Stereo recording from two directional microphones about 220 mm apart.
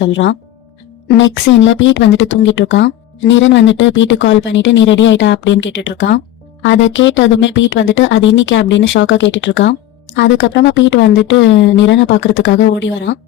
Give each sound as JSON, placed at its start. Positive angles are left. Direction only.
{"t": 0.0, "sound": "speech", "side_deg": 55}